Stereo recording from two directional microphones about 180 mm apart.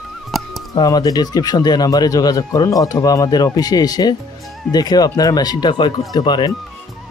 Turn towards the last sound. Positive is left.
turn(degrees=25)  # may be behind; listen again after turning